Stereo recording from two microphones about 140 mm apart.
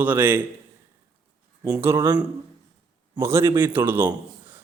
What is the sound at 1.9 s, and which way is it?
A man's voice, 25° right (ahead or behind).